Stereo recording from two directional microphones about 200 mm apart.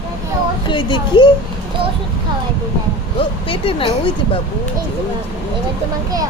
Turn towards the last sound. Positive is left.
turn(degrees=25)  # may be behind; listen again after turning